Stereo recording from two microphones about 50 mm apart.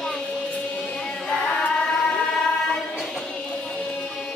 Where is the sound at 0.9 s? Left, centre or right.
Centre.